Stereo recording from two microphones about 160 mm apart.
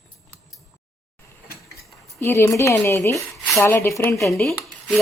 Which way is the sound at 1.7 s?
15° left (ahead or behind).